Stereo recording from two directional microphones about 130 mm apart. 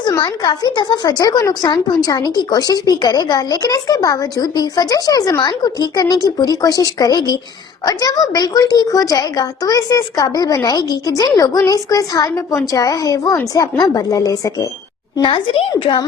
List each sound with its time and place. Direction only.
0.1 s a woman's voice: 30° left (ahead or behind)
15.2 s a woman's voice: 40° left (ahead or behind)